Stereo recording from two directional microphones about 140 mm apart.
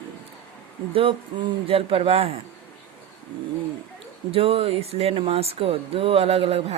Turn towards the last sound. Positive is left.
turn(degrees=-45)  # may be behind; listen again after turning